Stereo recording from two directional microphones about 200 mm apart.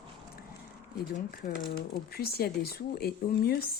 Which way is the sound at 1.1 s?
45° left (ahead or behind).